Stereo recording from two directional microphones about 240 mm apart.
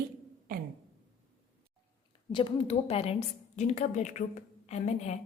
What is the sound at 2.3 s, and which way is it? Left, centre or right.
A woman's voice, left.